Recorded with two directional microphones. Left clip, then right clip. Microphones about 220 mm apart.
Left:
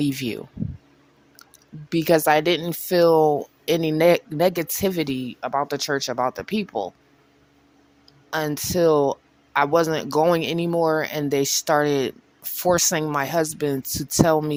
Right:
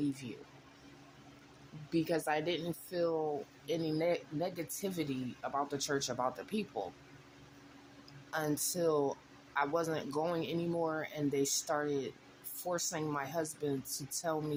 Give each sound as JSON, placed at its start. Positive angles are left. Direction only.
{"t": 1.9, "sound": "speech", "side_deg": 50}
{"t": 8.3, "sound": "speech", "side_deg": 40}